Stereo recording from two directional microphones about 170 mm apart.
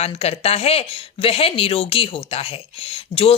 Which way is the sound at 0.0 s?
35° left (ahead or behind).